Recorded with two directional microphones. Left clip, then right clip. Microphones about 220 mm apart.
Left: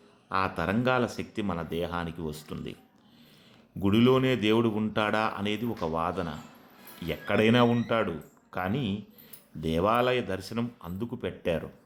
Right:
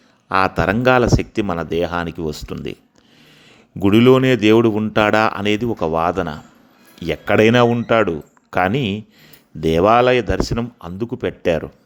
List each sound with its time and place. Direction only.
0.3 s speech: 35° right (ahead or behind)
3.8 s speech: 35° right (ahead or behind)